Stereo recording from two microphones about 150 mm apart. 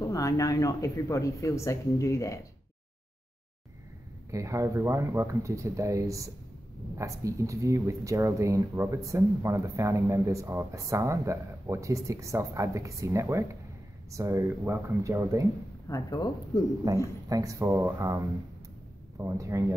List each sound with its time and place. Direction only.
0.0 s speech: 20° left (ahead or behind)
4.3 s speech: 20° right (ahead or behind)
15.9 s speech: 25° left (ahead or behind)
16.8 s speech: 25° right (ahead or behind)